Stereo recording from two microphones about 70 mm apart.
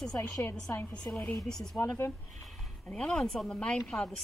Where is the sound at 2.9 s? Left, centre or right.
Centre.